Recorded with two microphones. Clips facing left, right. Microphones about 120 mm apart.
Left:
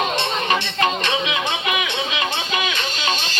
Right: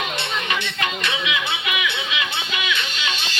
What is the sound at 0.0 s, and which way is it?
Music, 35° left (ahead or behind).